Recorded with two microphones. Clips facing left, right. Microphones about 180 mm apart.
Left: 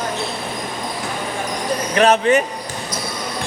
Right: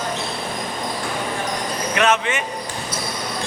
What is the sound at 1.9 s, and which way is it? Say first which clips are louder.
Speech: left 6 dB; 35° left (ahead or behind).